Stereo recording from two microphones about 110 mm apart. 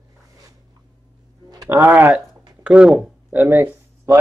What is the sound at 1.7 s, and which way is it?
Speech, 15° right (ahead or behind).